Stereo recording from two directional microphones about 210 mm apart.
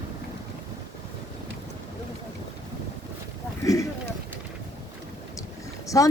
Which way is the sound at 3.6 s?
15° left (ahead or behind).